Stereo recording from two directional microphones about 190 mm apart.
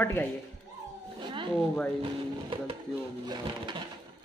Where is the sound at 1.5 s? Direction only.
5° left (ahead or behind).